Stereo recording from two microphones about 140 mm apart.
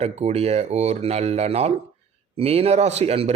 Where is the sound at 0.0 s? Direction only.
50° right (ahead or behind).